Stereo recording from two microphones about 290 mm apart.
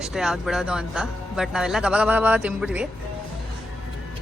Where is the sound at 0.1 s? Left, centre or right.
Centre.